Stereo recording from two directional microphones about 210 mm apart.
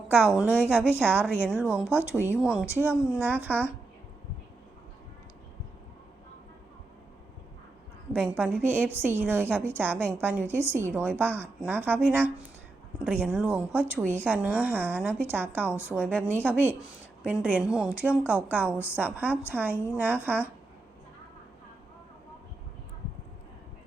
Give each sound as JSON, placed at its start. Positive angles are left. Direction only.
{"t": 0.4, "sound": "a woman's voice", "side_deg": -5}
{"t": 8.2, "sound": "a woman's voice", "side_deg": -5}